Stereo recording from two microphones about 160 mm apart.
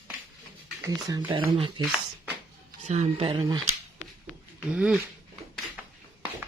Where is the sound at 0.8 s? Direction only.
20° right (ahead or behind).